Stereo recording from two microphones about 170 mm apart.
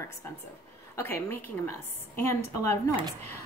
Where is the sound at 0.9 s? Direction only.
15° left (ahead or behind).